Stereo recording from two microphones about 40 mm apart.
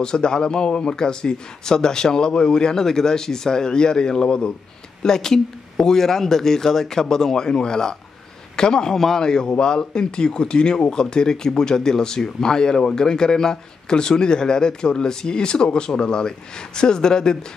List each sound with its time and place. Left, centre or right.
0.0 s a man's voice: centre